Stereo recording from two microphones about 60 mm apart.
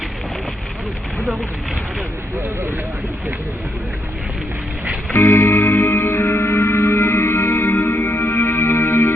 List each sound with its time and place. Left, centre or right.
5.1 s music: left
5.5 s music: left